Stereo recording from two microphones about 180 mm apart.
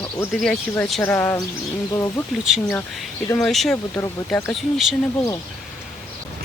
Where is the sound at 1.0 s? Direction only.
15° left (ahead or behind).